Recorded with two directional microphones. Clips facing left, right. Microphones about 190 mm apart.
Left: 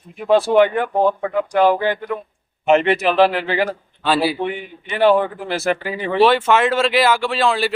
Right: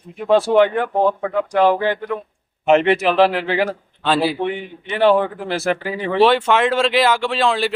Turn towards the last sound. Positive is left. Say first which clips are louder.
# even
turn(degrees=5)  # may be behind; listen again after turning